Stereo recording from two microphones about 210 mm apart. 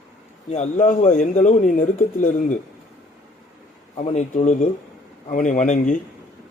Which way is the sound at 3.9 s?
35° left (ahead or behind).